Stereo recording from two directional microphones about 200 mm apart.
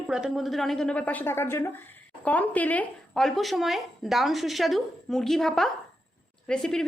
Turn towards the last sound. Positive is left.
turn(degrees=0)  # may be behind; listen again after turning